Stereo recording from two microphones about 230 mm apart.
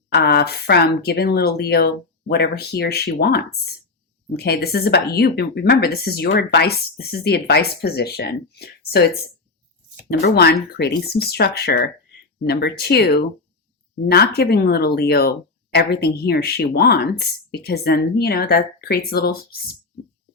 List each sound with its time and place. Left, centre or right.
0.1 s speech: left
10.1 s speech: left